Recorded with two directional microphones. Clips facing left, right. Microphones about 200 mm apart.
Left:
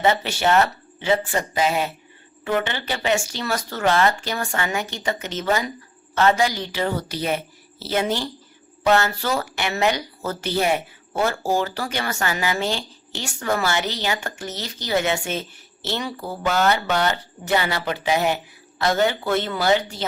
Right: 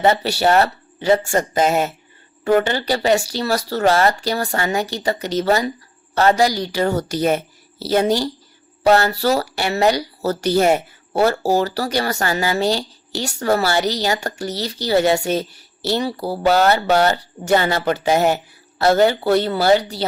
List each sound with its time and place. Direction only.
0.0 s speech: 35° right (ahead or behind)